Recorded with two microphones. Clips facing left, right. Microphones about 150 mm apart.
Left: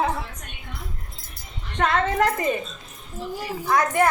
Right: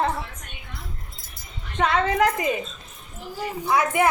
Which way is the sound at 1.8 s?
Centre (ahead or behind).